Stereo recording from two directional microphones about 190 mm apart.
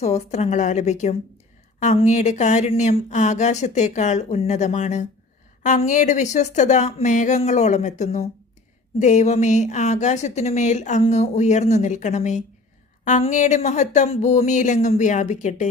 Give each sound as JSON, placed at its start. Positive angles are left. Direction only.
{"t": 0.0, "sound": "speech", "side_deg": 35}